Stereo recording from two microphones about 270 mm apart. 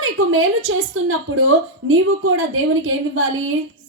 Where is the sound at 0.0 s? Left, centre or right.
Right.